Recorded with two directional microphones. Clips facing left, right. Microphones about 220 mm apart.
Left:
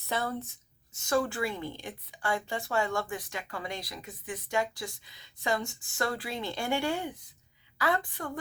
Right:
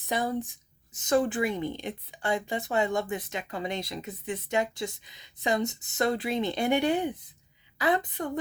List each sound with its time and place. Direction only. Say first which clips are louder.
0.0 s a woman's voice: right 4 dB; 15° right (ahead or behind)